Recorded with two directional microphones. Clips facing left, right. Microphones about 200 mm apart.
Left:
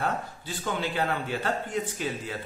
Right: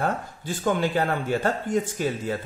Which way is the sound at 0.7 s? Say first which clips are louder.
Right 6 dB; 45° right (ahead or behind).